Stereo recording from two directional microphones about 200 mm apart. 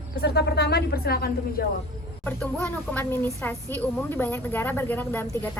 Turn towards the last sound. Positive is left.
turn(degrees=10)  # may be behind; listen again after turning